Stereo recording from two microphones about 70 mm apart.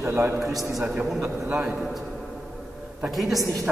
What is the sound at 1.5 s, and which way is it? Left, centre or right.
Speech, centre.